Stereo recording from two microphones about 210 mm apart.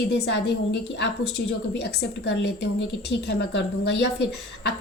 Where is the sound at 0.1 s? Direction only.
55° left (ahead or behind).